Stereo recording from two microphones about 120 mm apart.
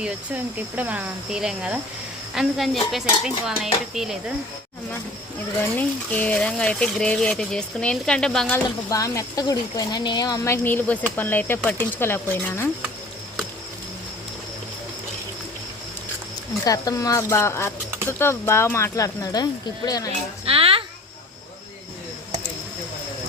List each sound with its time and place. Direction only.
0.0 s speech: 15° right (ahead or behind)
5.5 s speech: 15° left (ahead or behind)
8.9 s speech: 25° left (ahead or behind)
16.6 s speech: 30° left (ahead or behind)
20.4 s a sound: 50° right (ahead or behind)